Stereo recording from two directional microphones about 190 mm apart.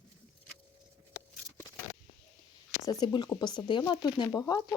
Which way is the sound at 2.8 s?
20° left (ahead or behind).